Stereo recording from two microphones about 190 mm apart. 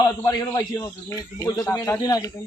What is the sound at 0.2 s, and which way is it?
A man's voice, 20° left (ahead or behind).